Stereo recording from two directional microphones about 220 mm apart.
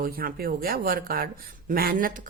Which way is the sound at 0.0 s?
40° right (ahead or behind).